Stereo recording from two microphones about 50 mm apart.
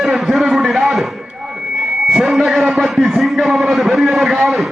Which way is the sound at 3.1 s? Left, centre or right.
Centre.